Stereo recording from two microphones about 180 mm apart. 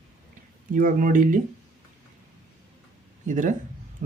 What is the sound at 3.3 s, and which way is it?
Speech, 45° right (ahead or behind).